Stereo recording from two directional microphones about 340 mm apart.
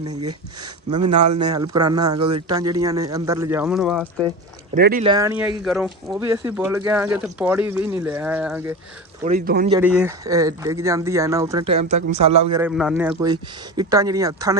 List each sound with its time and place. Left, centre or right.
0.9 s a man's voice: right
1.1 s speech: centre
4.7 s speech: right
5.0 s speech: centre
9.2 s speech: right
9.7 s speech: centre